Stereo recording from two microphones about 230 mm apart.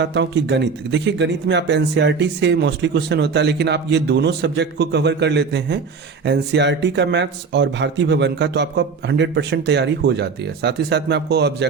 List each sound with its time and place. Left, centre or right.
0.0 s speech: right